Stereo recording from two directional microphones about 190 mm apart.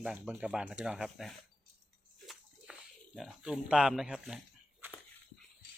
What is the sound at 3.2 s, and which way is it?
Speech, 5° right (ahead or behind).